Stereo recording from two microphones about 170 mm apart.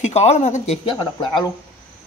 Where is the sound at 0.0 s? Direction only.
40° left (ahead or behind).